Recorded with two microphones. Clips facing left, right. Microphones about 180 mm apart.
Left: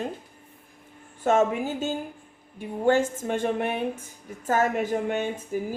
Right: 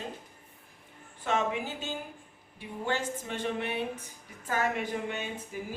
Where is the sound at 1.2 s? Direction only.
45° left (ahead or behind).